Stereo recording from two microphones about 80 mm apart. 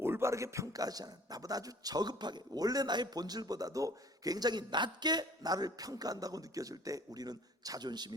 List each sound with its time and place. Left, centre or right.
0.0 s a man's voice: right